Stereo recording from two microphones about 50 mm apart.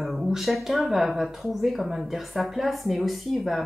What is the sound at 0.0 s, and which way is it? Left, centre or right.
Speech, centre.